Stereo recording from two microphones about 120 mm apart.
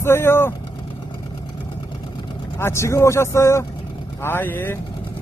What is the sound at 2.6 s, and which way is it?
Speech, 20° left (ahead or behind).